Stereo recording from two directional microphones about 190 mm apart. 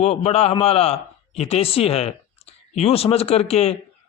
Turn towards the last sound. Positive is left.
turn(degrees=35)  # may be behind; listen again after turning